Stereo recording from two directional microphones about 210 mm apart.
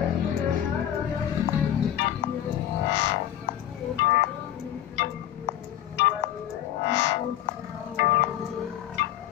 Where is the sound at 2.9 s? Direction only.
55° left (ahead or behind).